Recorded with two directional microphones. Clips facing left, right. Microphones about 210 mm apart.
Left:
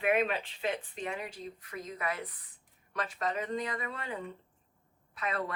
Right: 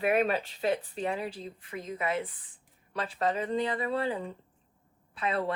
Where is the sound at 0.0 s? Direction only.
40° right (ahead or behind).